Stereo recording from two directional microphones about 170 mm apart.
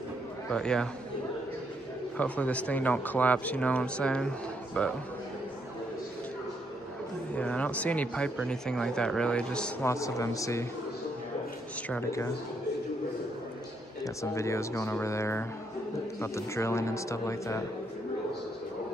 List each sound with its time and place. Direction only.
0.5 s speech: 5° left (ahead or behind)
2.1 s speech: 10° left (ahead or behind)
7.3 s speech: 10° left (ahead or behind)
9.8 s speech: 20° left (ahead or behind)
11.9 s speech: 15° left (ahead or behind)
14.0 s speech: 15° left (ahead or behind)